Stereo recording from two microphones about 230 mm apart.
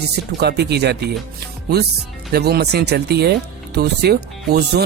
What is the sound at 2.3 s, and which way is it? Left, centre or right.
Speech, right.